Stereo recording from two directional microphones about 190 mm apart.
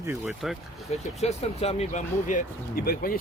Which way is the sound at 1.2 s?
35° left (ahead or behind).